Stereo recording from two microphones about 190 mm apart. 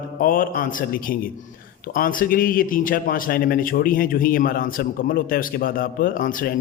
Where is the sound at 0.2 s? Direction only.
50° left (ahead or behind).